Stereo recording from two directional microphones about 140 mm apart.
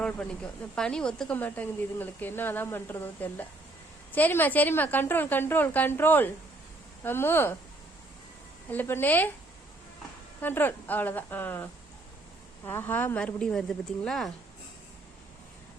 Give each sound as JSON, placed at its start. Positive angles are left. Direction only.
{"t": 0.8, "sound": "a woman's voice", "side_deg": 5}
{"t": 8.7, "sound": "a woman's voice", "side_deg": 15}
{"t": 10.4, "sound": "a woman's voice", "side_deg": 15}